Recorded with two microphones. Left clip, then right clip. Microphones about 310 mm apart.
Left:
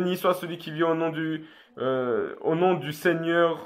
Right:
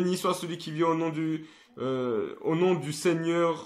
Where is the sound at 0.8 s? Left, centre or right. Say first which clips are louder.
Left 2 dB; left.